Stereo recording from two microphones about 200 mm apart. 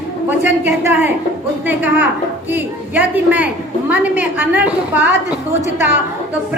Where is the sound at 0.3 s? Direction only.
10° right (ahead or behind).